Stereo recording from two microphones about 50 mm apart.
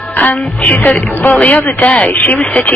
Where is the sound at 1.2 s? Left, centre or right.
Left.